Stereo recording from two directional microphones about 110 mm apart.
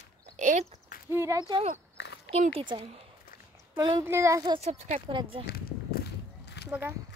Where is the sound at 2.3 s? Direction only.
65° right (ahead or behind).